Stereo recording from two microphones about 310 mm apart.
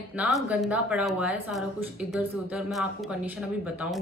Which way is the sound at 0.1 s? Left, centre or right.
Centre.